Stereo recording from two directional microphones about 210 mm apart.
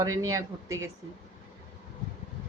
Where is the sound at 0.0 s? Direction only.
15° right (ahead or behind).